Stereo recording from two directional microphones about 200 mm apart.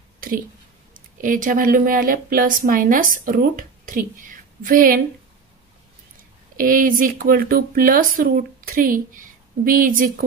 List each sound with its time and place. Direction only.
0.9 s speech: 40° right (ahead or behind)
6.5 s speech: 40° right (ahead or behind)